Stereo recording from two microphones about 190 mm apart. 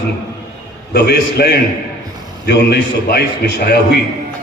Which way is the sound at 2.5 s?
60° left (ahead or behind).